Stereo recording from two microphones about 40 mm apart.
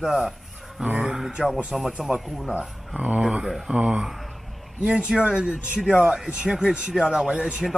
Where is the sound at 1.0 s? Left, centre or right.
Centre.